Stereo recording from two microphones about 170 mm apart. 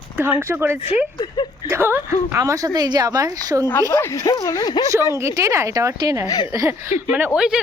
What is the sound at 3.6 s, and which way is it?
Speech, 15° left (ahead or behind).